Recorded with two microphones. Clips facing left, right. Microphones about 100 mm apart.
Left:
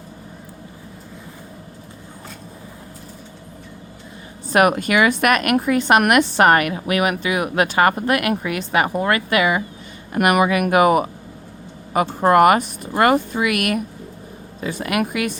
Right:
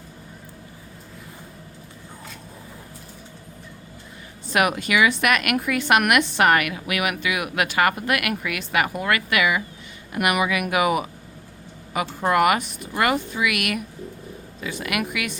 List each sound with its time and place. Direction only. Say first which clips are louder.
4.5 s a woman's voice: left 5 dB; 45° left (ahead or behind)